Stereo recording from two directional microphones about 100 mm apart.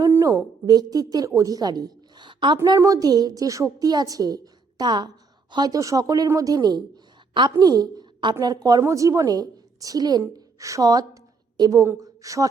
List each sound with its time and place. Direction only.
0.1 s a sound: 30° right (ahead or behind)
0.6 s a woman's voice: 40° right (ahead or behind)
2.7 s a woman's voice: 30° right (ahead or behind)